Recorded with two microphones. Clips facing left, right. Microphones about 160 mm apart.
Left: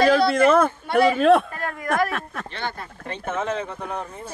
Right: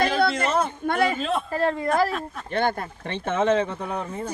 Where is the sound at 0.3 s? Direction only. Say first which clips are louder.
Left 7 dB; 55° left (ahead or behind).